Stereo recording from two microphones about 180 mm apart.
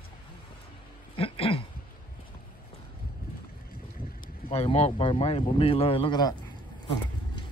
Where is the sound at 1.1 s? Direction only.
30° left (ahead or behind).